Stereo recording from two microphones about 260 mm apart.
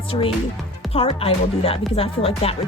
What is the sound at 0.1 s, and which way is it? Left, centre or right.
Speech, centre.